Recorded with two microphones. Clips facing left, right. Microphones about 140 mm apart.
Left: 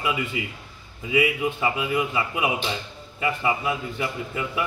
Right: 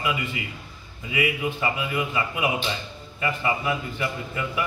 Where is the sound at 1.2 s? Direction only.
20° left (ahead or behind).